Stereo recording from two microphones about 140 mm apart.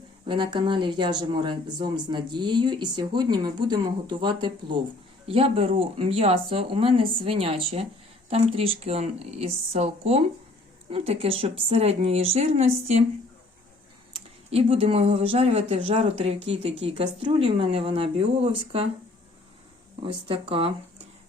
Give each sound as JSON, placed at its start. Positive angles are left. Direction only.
{"t": 0.3, "sound": "speech", "side_deg": -35}
{"t": 14.1, "sound": "speech", "side_deg": -45}
{"t": 20.2, "sound": "speech", "side_deg": -40}